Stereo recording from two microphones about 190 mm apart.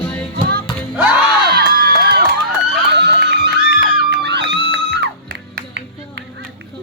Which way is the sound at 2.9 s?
60° right (ahead or behind).